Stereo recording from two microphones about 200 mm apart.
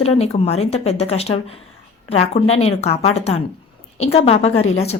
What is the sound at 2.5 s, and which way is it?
A woman's voice, 30° left (ahead or behind).